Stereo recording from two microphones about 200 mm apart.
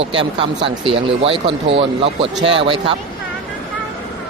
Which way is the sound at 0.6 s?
25° right (ahead or behind).